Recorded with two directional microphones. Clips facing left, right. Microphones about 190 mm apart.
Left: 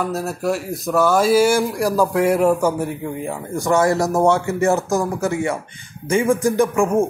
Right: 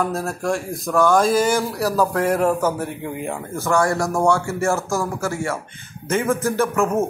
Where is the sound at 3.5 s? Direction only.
20° left (ahead or behind).